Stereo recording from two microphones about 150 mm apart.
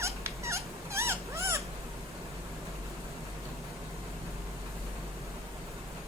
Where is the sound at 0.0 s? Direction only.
20° right (ahead or behind).